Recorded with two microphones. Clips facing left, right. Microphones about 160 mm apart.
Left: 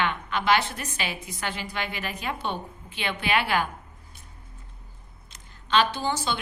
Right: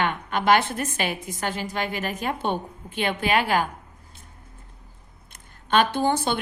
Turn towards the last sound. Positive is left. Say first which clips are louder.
# right 5 dB
turn(degrees=-55)  # may be behind; listen again after turning